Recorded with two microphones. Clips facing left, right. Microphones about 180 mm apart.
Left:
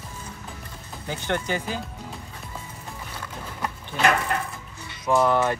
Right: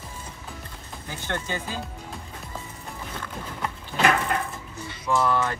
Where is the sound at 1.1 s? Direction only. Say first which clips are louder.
Left 4 dB; 15° left (ahead or behind).